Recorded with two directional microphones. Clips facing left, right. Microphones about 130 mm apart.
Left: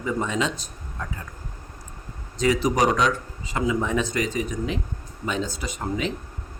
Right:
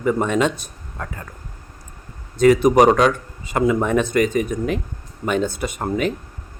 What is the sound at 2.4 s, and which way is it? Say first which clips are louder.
A man's voice: right 8 dB; 55° right (ahead or behind).